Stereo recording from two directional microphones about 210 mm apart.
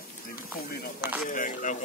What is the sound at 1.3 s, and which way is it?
Speech, 40° left (ahead or behind).